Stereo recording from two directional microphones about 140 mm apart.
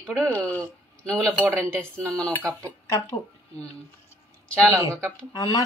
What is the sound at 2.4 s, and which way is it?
Speech, 20° right (ahead or behind).